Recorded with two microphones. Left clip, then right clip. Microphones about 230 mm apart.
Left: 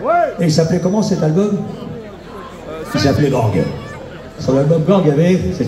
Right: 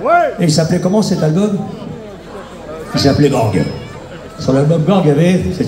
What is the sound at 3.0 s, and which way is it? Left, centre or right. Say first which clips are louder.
A man's voice: right 3 dB; right.